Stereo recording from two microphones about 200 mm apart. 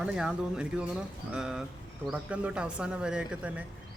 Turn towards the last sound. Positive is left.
turn(degrees=-5)  # may be behind; listen again after turning